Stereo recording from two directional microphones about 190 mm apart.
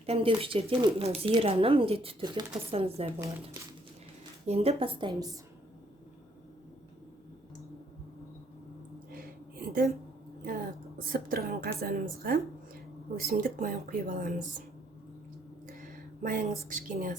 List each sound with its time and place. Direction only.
0.0 s speech: 30° right (ahead or behind)
4.4 s speech: 35° right (ahead or behind)
9.0 s a sound: 50° right (ahead or behind)
10.4 s a woman's voice: 50° right (ahead or behind)
15.6 s speech: 45° right (ahead or behind)